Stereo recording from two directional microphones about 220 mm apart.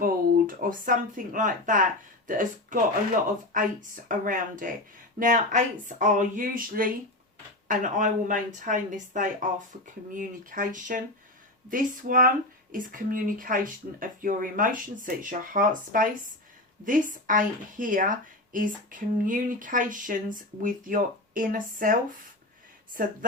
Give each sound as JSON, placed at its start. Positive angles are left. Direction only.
{"t": 0.0, "sound": "a woman's voice", "side_deg": -40}